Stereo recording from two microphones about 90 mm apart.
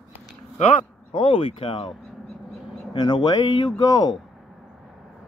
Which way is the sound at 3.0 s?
50° left (ahead or behind).